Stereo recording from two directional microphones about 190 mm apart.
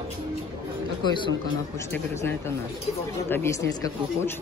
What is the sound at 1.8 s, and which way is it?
Speech, 15° left (ahead or behind).